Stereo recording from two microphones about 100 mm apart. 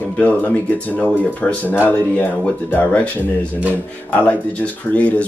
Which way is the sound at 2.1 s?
15° left (ahead or behind).